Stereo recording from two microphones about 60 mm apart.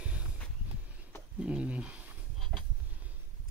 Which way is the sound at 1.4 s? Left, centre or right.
Centre.